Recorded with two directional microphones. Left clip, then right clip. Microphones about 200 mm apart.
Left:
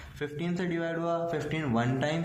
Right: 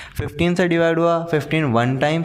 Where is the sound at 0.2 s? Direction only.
50° right (ahead or behind).